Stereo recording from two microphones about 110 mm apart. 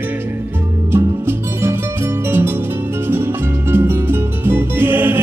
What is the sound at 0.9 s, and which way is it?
Music, 20° right (ahead or behind).